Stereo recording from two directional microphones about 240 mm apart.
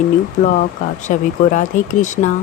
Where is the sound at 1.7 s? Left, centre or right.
Left.